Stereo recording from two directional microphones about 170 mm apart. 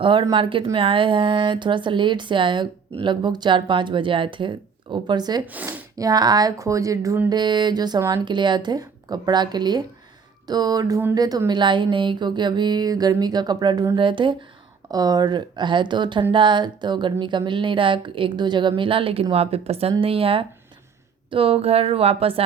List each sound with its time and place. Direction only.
0.0 s speech: 30° right (ahead or behind)
5.5 s speech: 10° right (ahead or behind)
6.0 s a woman's voice: 25° right (ahead or behind)